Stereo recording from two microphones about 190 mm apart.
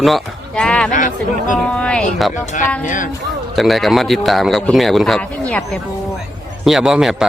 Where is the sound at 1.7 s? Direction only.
5° left (ahead or behind).